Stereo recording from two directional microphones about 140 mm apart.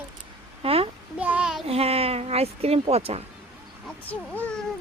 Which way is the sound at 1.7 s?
45° right (ahead or behind).